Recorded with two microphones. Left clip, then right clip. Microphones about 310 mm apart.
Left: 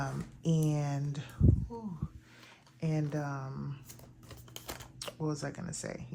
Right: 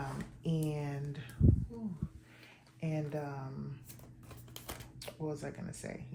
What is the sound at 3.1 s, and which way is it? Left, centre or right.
Speech, left.